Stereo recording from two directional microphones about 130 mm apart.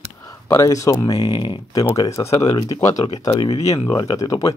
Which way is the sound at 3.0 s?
45° left (ahead or behind).